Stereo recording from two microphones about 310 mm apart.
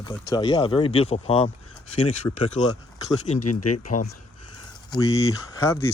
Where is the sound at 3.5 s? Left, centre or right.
Left.